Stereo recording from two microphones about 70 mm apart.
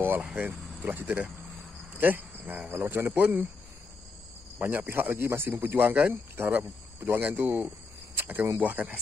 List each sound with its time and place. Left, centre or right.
0.0 s vehicle: right
0.4 s speech: right
4.6 s speech: right
6.3 s cricket: right
7.2 s speech: right